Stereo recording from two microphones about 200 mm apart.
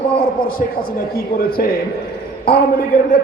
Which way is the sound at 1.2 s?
50° left (ahead or behind).